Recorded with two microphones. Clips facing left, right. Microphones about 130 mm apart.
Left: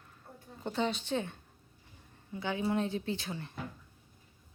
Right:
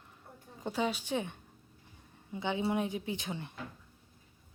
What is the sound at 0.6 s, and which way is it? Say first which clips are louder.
Speech: even; 10° right (ahead or behind).